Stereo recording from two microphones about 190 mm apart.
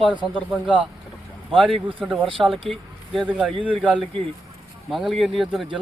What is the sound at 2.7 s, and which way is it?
Speech, centre (ahead or behind).